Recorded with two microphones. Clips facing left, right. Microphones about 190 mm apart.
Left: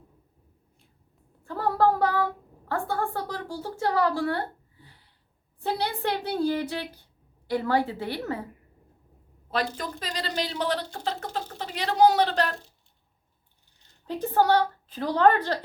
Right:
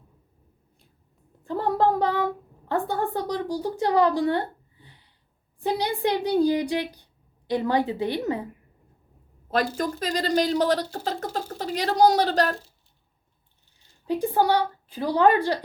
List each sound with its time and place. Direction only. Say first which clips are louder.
1.5 s a woman's voice: right 1 dB; 20° right (ahead or behind)
9.5 s a woman's voice: right 5 dB; 45° right (ahead or behind)
14.1 s speech: right 1 dB; 10° right (ahead or behind)